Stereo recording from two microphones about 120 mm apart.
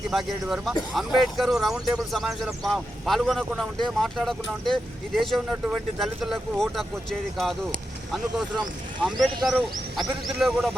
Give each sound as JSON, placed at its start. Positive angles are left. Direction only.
{"t": 0.1, "sound": "speech", "side_deg": -5}